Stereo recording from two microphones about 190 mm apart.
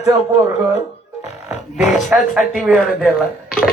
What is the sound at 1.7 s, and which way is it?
Speech, centre (ahead or behind).